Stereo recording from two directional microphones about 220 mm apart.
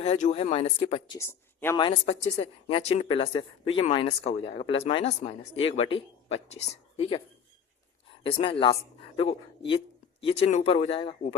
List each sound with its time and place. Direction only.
0.0 s speech: 30° left (ahead or behind); by 1.8 s 15° left (ahead or behind)
1.8 s speech: 30° left (ahead or behind)
8.2 s speech: 25° left (ahead or behind)